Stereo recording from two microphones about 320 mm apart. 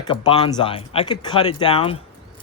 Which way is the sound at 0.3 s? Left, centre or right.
Centre.